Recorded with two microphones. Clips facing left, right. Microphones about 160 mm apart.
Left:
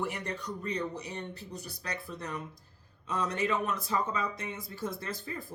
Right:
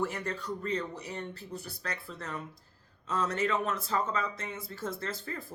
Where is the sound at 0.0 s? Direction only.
15° left (ahead or behind).